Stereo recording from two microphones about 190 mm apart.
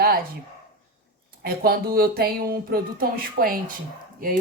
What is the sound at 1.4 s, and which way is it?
Speech, 55° right (ahead or behind).